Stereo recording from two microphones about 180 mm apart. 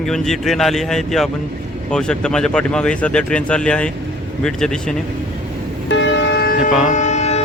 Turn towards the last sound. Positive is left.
turn(degrees=40)  # may be behind; listen again after turning